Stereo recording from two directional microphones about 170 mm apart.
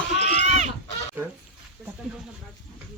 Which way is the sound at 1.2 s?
10° right (ahead or behind).